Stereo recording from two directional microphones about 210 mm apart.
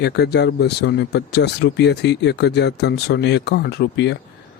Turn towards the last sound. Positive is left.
turn(degrees=55)  # may be behind; listen again after turning